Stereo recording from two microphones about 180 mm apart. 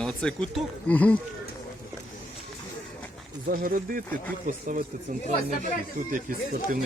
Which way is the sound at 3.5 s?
50° right (ahead or behind).